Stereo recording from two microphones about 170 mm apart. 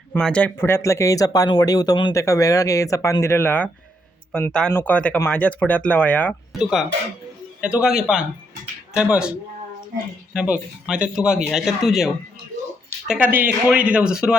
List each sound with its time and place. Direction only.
0.1 s speech: 5° left (ahead or behind)
6.5 s speech: 5° right (ahead or behind)
10.3 s speech: 5° right (ahead or behind)